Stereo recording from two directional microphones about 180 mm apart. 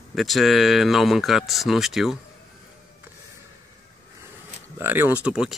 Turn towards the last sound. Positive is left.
turn(degrees=-5)  # may be behind; listen again after turning